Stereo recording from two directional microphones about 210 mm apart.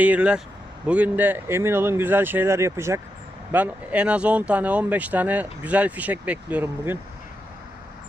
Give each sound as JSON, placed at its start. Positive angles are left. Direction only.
{"t": 0.0, "sound": "speech", "side_deg": -5}